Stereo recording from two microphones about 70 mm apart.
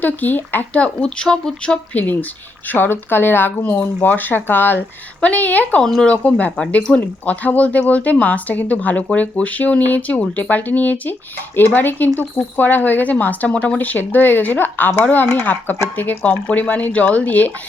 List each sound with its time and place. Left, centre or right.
0.0 s speech: left
5.8 s speech: centre